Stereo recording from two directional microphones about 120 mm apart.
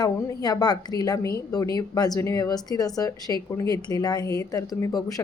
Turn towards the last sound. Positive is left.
turn(degrees=30)  # may be behind; listen again after turning